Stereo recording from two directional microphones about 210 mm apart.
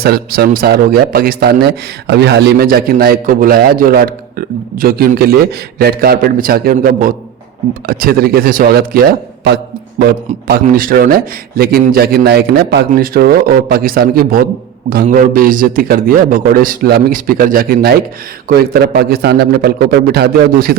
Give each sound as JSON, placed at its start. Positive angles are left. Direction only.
{"t": 0.0, "sound": "a man's voice", "side_deg": -45}